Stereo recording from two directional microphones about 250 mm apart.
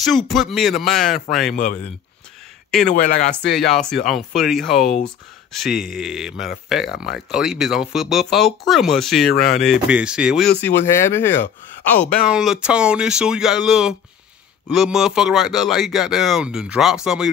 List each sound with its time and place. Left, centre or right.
0.0 s speech: centre
1.5 s speech: left
3.2 s speech: centre
10.6 s speech: centre